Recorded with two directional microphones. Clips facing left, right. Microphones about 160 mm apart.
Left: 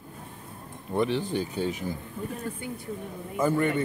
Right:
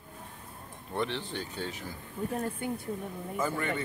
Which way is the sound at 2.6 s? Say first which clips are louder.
Right 2 dB; 55° right (ahead or behind).